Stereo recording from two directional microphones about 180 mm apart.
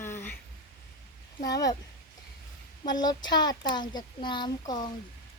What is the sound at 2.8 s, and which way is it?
Speech, 20° left (ahead or behind).